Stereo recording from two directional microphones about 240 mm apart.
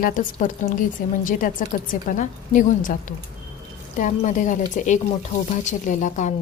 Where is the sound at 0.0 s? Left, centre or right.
Left.